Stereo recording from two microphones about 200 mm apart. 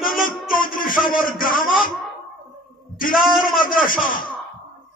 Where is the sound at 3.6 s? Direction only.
45° left (ahead or behind).